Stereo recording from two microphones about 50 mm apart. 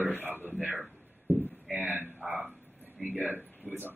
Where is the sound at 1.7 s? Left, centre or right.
Right.